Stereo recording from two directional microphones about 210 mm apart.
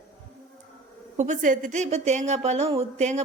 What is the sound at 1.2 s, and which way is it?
A woman's voice, 35° right (ahead or behind).